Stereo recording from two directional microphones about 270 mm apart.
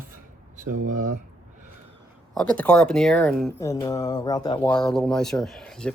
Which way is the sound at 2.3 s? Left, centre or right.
Centre.